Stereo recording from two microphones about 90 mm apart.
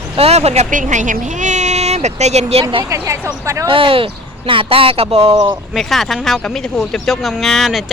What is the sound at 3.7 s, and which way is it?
Speech, 85° right.